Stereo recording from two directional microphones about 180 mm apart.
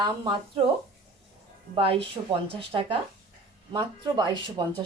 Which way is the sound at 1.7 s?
30° right (ahead or behind).